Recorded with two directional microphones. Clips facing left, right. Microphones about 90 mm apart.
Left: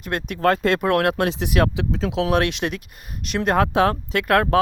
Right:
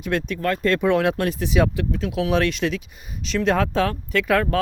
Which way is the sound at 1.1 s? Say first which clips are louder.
Even; 80° left.